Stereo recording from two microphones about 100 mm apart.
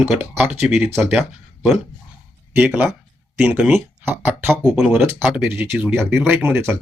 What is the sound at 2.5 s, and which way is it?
Speech, 15° right (ahead or behind).